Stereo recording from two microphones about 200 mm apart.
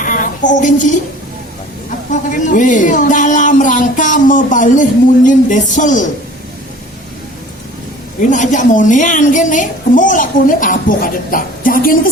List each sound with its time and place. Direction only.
0.0 s a woman's voice: 40° left (ahead or behind)
2.3 s a woman's voice: 40° left (ahead or behind)
8.2 s a woman's voice: 40° left (ahead or behind)